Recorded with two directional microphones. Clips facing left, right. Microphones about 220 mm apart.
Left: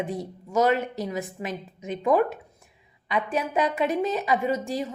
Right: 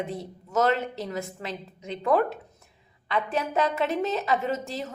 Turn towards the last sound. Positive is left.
turn(degrees=15)  # may be behind; listen again after turning